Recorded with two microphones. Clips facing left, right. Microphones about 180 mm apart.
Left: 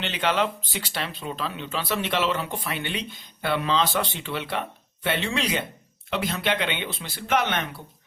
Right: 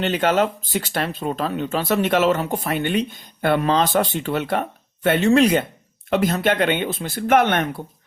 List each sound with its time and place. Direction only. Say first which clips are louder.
0.0 s speech: right 6 dB; 45° right (ahead or behind)